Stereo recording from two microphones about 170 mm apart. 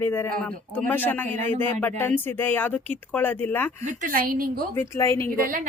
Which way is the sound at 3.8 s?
55° right (ahead or behind).